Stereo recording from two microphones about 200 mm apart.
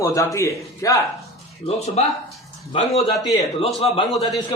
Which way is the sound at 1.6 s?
30° left (ahead or behind).